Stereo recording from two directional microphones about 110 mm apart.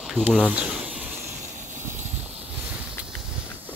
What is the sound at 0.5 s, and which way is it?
Snake, 10° right (ahead or behind).